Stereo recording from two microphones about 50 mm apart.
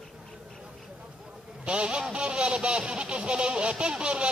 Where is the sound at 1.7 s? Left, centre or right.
Right.